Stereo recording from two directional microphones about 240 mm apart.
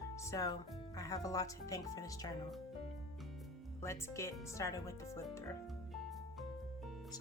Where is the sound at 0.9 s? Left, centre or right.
Centre.